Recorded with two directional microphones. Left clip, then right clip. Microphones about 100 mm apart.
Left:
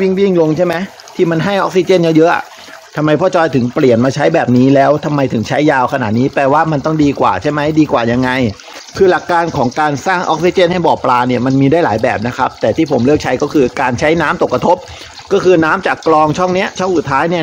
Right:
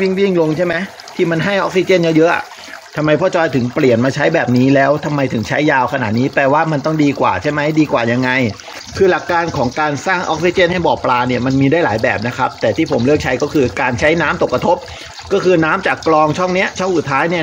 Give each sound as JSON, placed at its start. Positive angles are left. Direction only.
{"t": 0.0, "sound": "speech", "side_deg": 50}